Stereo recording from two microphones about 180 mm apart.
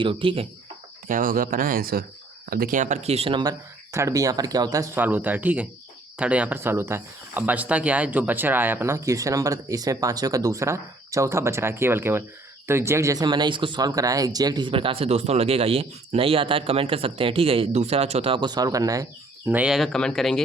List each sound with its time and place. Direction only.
0.0 s speech: 30° right (ahead or behind)
1.0 s speech: 50° right (ahead or behind); by 3.5 s 30° right (ahead or behind)
3.9 s speech: 15° right (ahead or behind)
19.5 s speech: 5° right (ahead or behind)